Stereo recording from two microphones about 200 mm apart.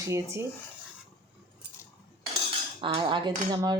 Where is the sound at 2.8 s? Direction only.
25° right (ahead or behind).